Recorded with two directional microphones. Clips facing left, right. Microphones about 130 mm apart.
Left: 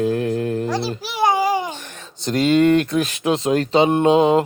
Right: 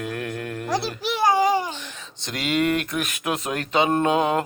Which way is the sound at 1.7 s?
50° left (ahead or behind).